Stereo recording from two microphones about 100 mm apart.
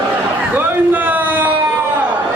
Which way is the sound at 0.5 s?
15° right (ahead or behind).